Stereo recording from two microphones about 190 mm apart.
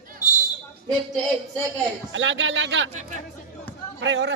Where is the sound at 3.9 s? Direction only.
70° right (ahead or behind).